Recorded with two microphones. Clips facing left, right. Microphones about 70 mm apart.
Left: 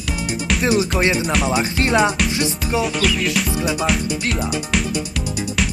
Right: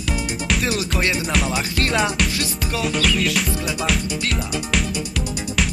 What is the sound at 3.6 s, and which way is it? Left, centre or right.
Music, centre.